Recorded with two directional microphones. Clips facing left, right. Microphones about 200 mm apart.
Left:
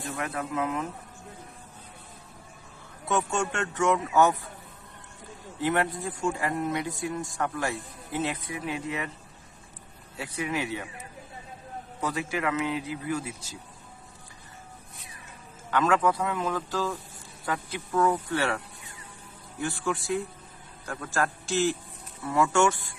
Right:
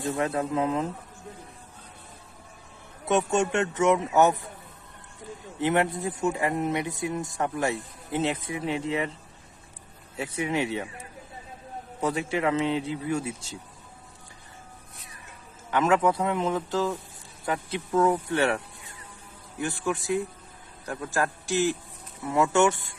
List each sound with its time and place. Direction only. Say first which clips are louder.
0.0 s speech: right 6 dB; 20° right (ahead or behind)
0.3 s speech: right 4 dB; 30° right (ahead or behind)
3.1 s speech: right 4 dB; 20° right (ahead or behind)
5.5 s speech: right 2 dB; 20° right (ahead or behind)
10.2 s speech: right 3 dB; 25° right (ahead or behind)
11.9 s speech: right 3 dB; 25° right (ahead or behind)
15.7 s speech: right 2 dB; 20° right (ahead or behind)
19.6 s a man's voice: right 1 dB; 20° right (ahead or behind)